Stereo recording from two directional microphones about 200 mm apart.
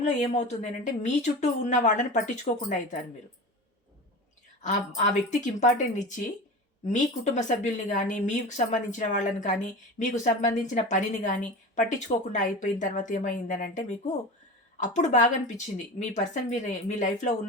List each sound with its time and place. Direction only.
0.0 s a woman's voice: 35° left (ahead or behind)
4.9 s a woman's voice: 35° left (ahead or behind)